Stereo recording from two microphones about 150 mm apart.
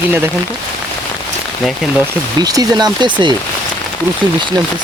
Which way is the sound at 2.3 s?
25° right (ahead or behind).